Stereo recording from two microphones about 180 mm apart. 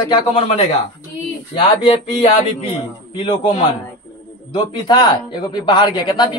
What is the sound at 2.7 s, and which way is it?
Speech, 30° left (ahead or behind).